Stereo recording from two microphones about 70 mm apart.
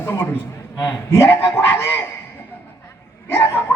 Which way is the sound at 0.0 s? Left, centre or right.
Left.